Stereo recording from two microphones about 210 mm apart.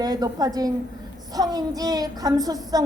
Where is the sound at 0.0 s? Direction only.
20° right (ahead or behind).